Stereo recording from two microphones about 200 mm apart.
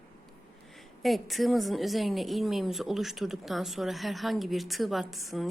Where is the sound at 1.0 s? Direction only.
Centre (ahead or behind).